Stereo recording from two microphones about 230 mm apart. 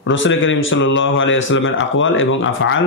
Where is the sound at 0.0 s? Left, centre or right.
Left.